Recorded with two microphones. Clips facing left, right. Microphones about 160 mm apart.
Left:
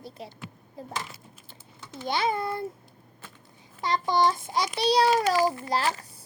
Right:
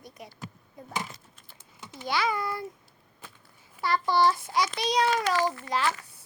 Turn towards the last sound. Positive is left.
turn(degrees=35)  # may be behind; listen again after turning